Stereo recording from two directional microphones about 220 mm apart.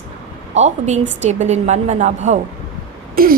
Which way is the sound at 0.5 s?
30° right (ahead or behind).